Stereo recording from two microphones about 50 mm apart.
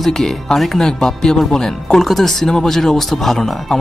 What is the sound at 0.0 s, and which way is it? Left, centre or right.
Speech, centre.